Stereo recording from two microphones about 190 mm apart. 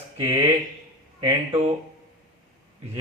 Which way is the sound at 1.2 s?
30° right (ahead or behind).